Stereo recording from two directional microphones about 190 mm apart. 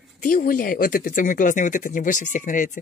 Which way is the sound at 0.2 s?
45° left (ahead or behind).